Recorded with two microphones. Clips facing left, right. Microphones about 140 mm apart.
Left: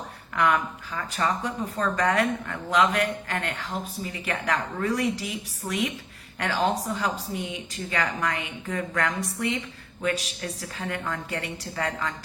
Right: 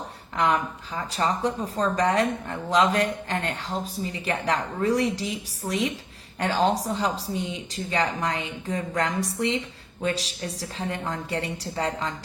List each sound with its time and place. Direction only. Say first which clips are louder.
0.3 s speech: even; 30° right (ahead or behind)